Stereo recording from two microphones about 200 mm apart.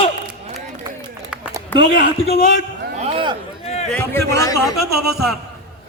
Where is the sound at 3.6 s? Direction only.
35° left (ahead or behind).